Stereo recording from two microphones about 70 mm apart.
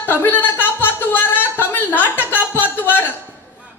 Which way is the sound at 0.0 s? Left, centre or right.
Left.